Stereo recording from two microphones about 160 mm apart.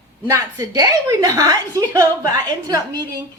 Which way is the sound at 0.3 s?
20° right (ahead or behind).